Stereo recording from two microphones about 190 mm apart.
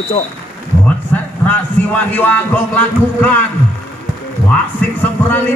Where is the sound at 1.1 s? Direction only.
10° left (ahead or behind).